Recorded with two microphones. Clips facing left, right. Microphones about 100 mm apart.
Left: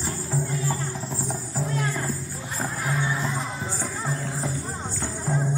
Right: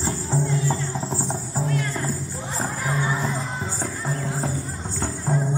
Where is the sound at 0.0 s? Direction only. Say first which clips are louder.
Right 4 dB; 25° right (ahead or behind).